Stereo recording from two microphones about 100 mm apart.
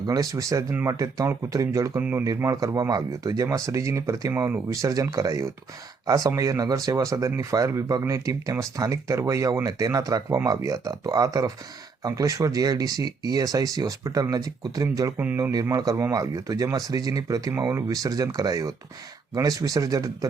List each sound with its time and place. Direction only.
0.0 s speech: 35° right (ahead or behind)
2.0 s speech: 20° right (ahead or behind)
2.2 s speech: 30° right (ahead or behind)